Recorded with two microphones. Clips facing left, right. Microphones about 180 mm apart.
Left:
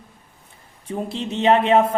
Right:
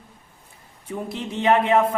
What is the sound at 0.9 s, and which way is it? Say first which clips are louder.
A woman's voice: left 3 dB; 25° left (ahead or behind).